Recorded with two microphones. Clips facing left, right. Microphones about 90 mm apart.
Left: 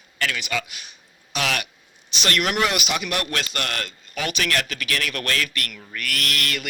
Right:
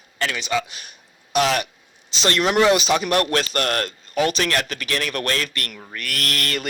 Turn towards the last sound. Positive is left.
turn(degrees=-35)  # may be behind; listen again after turning